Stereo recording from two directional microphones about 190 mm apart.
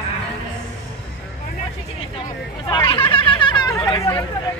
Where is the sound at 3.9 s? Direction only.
20° left (ahead or behind).